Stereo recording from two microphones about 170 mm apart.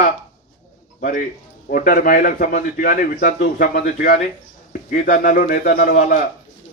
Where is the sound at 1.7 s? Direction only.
55° left (ahead or behind).